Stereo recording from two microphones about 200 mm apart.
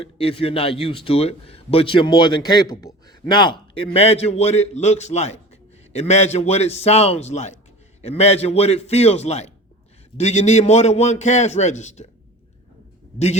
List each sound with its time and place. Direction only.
0.0 s a man's voice: 25° left (ahead or behind)
13.1 s a man's voice: 35° left (ahead or behind)